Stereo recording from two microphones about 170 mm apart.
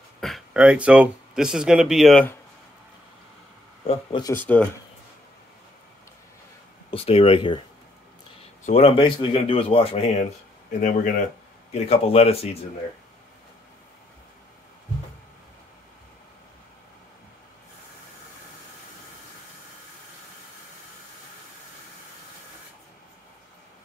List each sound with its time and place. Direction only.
0.2 s speech: centre (ahead or behind)
3.8 s speech: 35° left (ahead or behind)
4.2 s speech: 15° left (ahead or behind)
6.9 s speech: 35° left (ahead or behind)
10.8 s speech: 50° left (ahead or behind)
11.7 s speech: 35° left (ahead or behind)